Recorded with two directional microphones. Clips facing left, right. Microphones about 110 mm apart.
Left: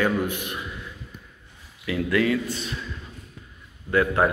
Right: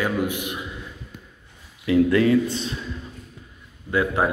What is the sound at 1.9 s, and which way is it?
Speech, 30° right (ahead or behind).